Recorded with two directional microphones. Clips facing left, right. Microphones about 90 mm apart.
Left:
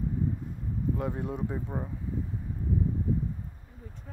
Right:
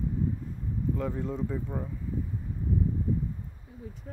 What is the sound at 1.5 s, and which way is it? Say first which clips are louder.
Speech: right 1 dB; 25° left (ahead or behind).